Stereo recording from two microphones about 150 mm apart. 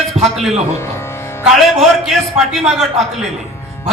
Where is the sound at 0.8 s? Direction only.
15° left (ahead or behind).